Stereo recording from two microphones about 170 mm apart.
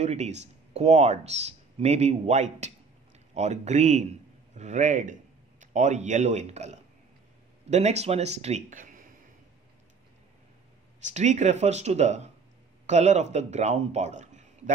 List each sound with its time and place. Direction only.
0.0 s a man's voice: 40° right (ahead or behind)
11.1 s a man's voice: 45° right (ahead or behind)